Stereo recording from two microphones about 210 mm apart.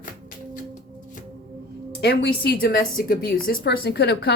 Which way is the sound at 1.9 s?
50° left (ahead or behind).